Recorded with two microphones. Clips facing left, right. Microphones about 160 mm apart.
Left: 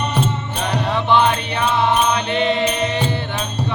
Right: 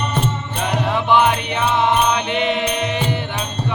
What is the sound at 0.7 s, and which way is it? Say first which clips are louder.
Music: even; 10° right (ahead or behind).